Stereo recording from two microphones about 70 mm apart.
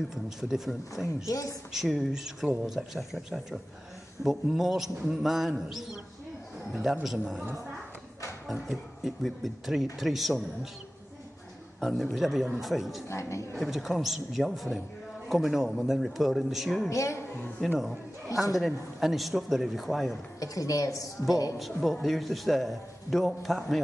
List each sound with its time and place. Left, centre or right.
0.1 s a man's voice: centre
1.0 s a woman's voice: left
1.7 s a man's voice: centre
4.2 s a man's voice: centre
8.5 s a man's voice: centre
11.8 s a man's voice: centre
13.1 s a woman's voice: left
13.6 s a man's voice: centre
16.9 s a woman's voice: left
17.7 s a man's voice: centre
20.3 s a woman's voice: left
21.5 s a man's voice: centre